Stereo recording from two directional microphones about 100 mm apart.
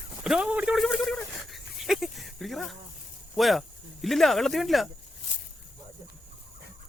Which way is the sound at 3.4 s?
Centre (ahead or behind).